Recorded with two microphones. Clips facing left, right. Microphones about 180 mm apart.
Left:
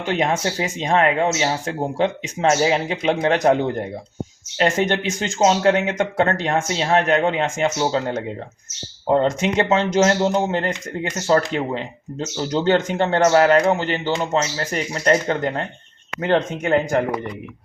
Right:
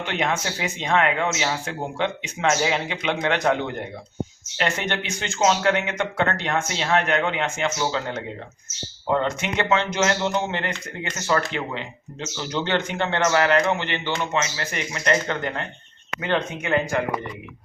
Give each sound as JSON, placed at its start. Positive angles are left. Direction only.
{"t": 0.0, "sound": "speech", "side_deg": 40}